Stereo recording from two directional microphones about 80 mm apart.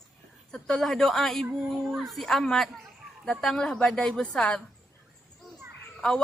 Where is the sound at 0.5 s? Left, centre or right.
Centre.